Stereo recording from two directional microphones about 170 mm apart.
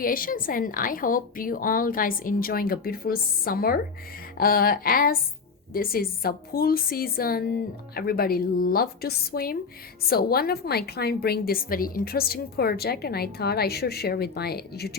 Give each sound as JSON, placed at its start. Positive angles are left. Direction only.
{"t": 0.0, "sound": "a woman's voice", "side_deg": 55}